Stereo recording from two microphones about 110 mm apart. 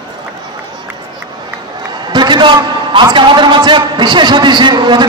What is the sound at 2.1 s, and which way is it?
A man's voice, 45° right (ahead or behind).